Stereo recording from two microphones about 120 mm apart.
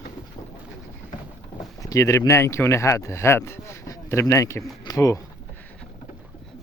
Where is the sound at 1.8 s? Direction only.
25° left (ahead or behind).